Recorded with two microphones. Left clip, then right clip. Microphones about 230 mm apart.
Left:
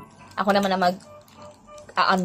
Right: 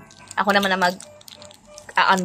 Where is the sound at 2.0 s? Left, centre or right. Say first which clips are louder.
Right 3 dB; right.